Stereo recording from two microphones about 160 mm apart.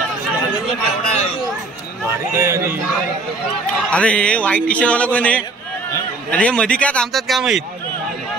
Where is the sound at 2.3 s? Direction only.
15° right (ahead or behind).